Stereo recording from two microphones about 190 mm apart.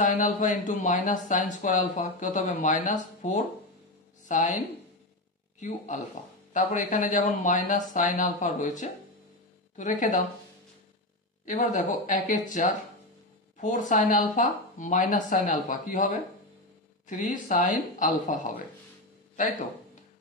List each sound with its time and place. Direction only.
0.0 s speech: 45° left (ahead or behind)
6.5 s speech: 40° left (ahead or behind)
11.4 s speech: 40° left (ahead or behind)